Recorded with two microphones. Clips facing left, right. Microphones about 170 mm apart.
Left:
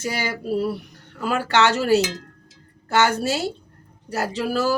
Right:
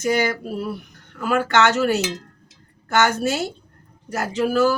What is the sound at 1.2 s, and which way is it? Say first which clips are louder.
A woman's voice: right 1 dB; 30° left (ahead or behind).